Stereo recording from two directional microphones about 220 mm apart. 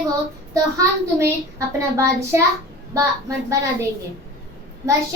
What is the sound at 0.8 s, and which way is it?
A child's voice, 15° right (ahead or behind).